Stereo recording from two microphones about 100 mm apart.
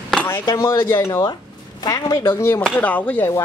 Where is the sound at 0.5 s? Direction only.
25° left (ahead or behind).